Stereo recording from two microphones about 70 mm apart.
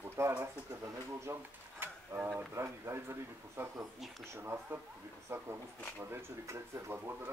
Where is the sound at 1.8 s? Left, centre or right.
Right.